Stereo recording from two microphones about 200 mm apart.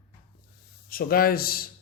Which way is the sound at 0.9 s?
45° left (ahead or behind).